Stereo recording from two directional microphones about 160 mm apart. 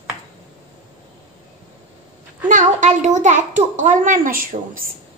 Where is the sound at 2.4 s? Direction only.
50° right (ahead or behind).